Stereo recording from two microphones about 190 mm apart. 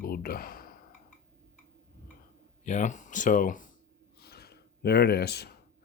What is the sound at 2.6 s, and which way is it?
Speech, 40° left (ahead or behind).